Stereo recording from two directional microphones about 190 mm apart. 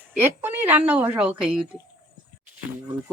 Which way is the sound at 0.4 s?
10° right (ahead or behind).